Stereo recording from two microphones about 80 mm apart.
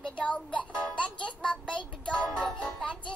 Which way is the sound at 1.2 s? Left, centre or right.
Centre.